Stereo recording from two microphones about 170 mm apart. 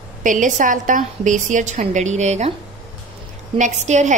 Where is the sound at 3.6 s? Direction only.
45° right (ahead or behind).